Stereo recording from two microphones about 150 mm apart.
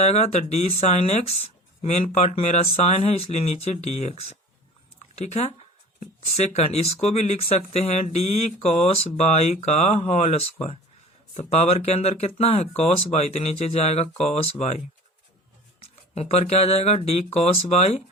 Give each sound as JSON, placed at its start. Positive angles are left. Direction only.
{"t": 0.0, "sound": "speech", "side_deg": 45}
{"t": 15.8, "sound": "speech", "side_deg": 45}